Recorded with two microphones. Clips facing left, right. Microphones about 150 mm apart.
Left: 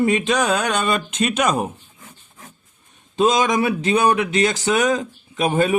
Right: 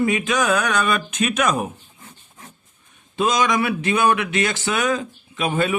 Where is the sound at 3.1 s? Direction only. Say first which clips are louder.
Left 2 dB; 40° left (ahead or behind).